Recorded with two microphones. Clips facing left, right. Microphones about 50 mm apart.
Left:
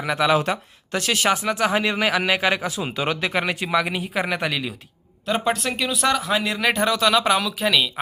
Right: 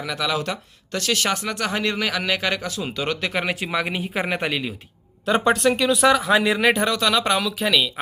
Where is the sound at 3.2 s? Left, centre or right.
Centre.